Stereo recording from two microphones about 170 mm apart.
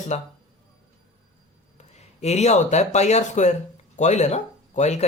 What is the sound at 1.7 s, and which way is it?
Speech, 40° left (ahead or behind).